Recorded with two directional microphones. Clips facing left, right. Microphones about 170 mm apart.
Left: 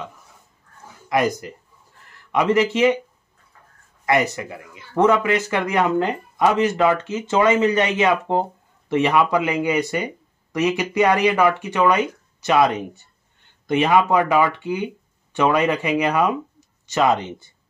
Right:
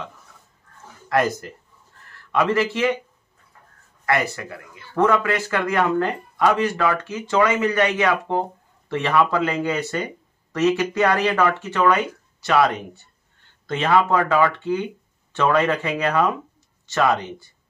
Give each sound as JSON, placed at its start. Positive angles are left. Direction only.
{"t": 1.0, "sound": "speech", "side_deg": 15}
{"t": 4.0, "sound": "speech", "side_deg": 20}